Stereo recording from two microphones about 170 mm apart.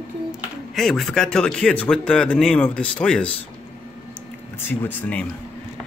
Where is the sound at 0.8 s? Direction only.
Centre (ahead or behind).